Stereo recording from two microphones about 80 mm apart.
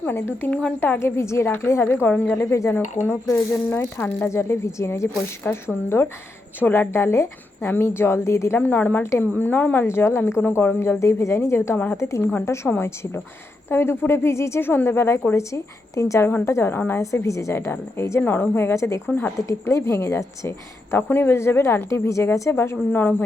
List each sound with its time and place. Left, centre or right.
0.0 s a woman's voice: left
2.1 s speech: centre
2.4 s a woman's voice: left
8.5 s a woman's voice: left
9.8 s a woman's voice: left
12.3 s a woman's voice: left
17.0 s a woman's voice: left
17.5 s a woman's voice: left
19.0 s a woman's voice: left
19.5 s a woman's voice: left